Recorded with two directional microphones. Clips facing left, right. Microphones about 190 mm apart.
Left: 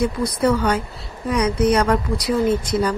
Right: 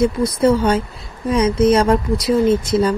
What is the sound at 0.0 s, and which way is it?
Speech, 25° right (ahead or behind).